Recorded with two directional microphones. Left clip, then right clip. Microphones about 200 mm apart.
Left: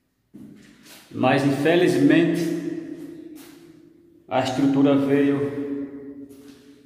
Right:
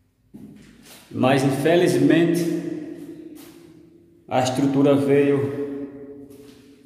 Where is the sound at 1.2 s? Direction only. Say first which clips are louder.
Right 1 dB; 10° right (ahead or behind).